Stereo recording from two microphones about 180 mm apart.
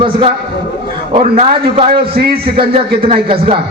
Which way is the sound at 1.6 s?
30° right (ahead or behind).